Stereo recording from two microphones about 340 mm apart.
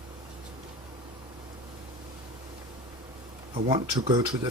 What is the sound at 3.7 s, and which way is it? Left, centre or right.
Speech, centre.